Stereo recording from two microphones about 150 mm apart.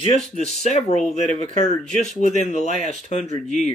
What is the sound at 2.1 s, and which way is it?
Speech, 50° left (ahead or behind).